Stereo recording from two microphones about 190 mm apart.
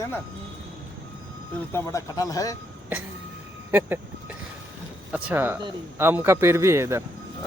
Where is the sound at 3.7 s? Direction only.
10° right (ahead or behind).